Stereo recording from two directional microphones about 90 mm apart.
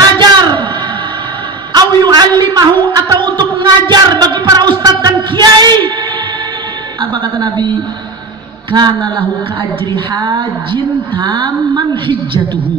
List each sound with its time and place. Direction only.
0.0 s a sound: 45° right (ahead or behind)
1.7 s a sound: 50° right (ahead or behind)
2.8 s music: 60° right (ahead or behind)
3.3 s child singing: 55° right (ahead or behind)
7.0 s a man's voice: 55° right (ahead or behind)
8.7 s a woman's voice: 55° right (ahead or behind)